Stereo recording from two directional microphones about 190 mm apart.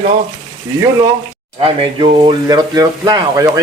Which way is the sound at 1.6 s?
25° right (ahead or behind).